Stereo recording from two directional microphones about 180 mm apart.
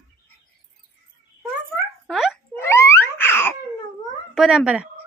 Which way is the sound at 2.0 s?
Centre (ahead or behind).